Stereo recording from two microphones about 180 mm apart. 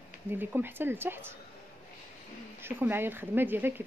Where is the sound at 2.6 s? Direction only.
10° right (ahead or behind).